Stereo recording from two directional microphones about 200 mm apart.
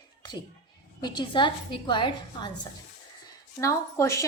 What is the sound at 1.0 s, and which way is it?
A woman's voice, 20° left (ahead or behind).